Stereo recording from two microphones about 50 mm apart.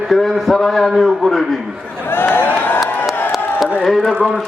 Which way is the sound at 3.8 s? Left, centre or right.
Centre.